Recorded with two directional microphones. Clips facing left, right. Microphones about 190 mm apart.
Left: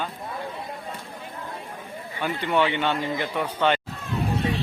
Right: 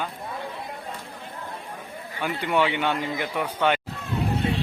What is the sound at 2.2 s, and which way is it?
A man's voice, 10° right (ahead or behind).